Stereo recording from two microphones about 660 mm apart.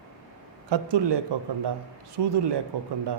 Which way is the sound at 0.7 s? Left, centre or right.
Right.